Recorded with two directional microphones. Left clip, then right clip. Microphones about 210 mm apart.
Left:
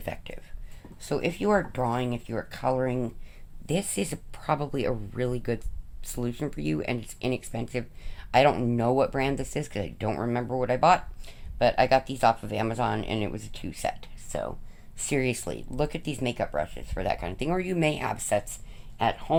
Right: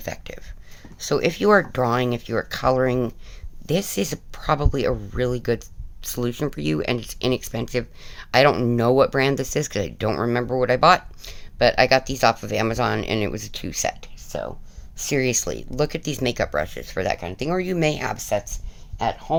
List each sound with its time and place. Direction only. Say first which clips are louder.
0.0 s a sound: right 4 dB; 20° right (ahead or behind)
0.9 s speech: right 8 dB; 35° right (ahead or behind)
14.3 s speech: right 3 dB; 15° right (ahead or behind)